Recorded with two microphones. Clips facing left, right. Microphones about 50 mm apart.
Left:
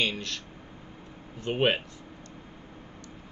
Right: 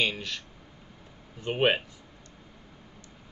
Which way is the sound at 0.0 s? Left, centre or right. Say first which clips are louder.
Right 1 dB; centre.